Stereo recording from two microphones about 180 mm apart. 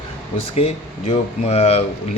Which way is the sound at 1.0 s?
35° left (ahead or behind).